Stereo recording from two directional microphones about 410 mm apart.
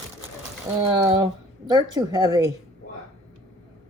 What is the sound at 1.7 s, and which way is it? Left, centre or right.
Speech, centre.